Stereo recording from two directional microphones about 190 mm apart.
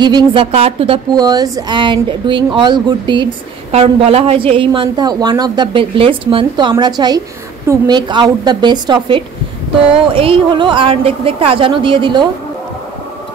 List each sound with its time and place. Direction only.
0.0 s a woman's voice: 25° right (ahead or behind)